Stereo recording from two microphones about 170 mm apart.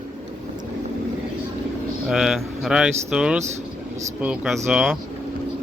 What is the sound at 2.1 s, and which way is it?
Speech, centre (ahead or behind).